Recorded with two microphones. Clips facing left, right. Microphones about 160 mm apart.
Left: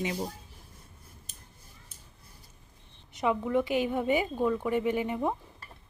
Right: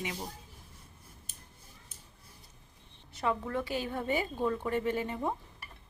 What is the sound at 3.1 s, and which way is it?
A woman's voice, 15° left (ahead or behind).